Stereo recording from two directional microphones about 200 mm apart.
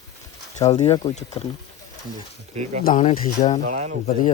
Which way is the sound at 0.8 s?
20° left (ahead or behind).